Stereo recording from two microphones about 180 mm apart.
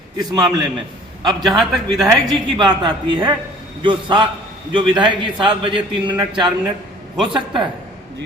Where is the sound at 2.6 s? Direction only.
25° right (ahead or behind).